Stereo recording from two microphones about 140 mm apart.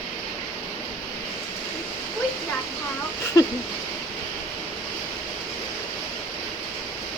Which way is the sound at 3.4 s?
25° left (ahead or behind).